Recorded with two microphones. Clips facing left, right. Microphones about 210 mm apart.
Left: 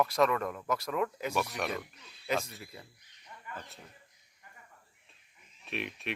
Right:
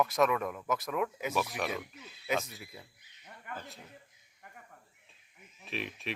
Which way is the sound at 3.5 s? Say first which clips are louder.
Right 2 dB; 60° right (ahead or behind).